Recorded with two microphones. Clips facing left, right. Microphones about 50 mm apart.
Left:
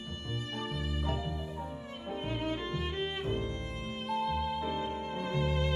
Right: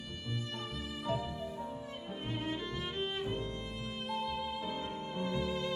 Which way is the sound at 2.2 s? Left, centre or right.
Left.